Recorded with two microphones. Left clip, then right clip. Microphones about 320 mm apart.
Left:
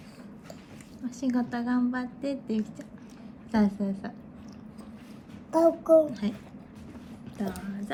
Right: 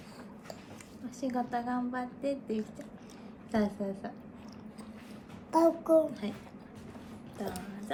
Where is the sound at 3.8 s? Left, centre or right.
Left.